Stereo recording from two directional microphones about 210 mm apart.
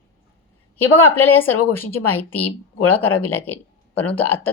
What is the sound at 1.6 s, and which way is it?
Speech, 90° left.